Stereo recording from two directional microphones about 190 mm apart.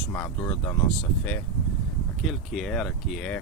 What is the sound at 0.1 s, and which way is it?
Speech, 20° left (ahead or behind).